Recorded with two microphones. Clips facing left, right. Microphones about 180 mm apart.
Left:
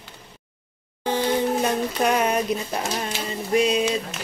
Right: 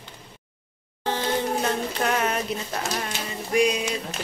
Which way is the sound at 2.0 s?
15° left (ahead or behind).